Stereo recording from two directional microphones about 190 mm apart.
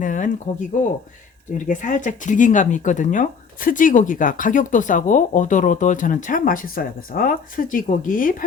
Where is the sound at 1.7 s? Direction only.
40° left (ahead or behind).